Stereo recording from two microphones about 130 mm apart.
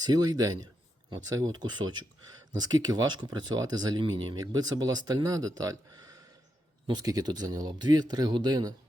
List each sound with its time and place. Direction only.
0.0 s speech: 30° right (ahead or behind)